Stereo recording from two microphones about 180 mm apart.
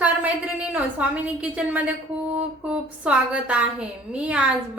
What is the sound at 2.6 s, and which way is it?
A woman's voice, 5° right (ahead or behind).